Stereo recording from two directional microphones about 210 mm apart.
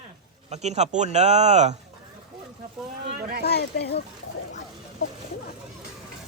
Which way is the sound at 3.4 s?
50° left (ahead or behind).